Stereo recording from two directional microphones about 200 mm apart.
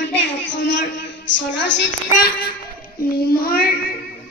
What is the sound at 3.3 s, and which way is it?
Child singing, 50° left (ahead or behind).